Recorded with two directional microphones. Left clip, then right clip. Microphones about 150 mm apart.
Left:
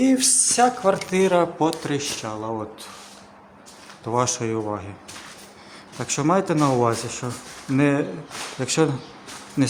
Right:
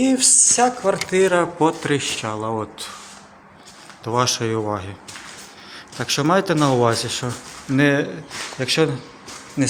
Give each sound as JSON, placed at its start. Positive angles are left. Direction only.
{"t": 0.0, "sound": "speech", "side_deg": 10}
{"t": 1.2, "sound": "speech", "side_deg": 15}
{"t": 1.5, "sound": "speech", "side_deg": -5}
{"t": 4.0, "sound": "speech", "side_deg": 10}
{"t": 4.4, "sound": "speech", "side_deg": -5}
{"t": 6.0, "sound": "speech", "side_deg": 5}
{"t": 8.5, "sound": "speech", "side_deg": 20}
{"t": 9.6, "sound": "speech", "side_deg": 35}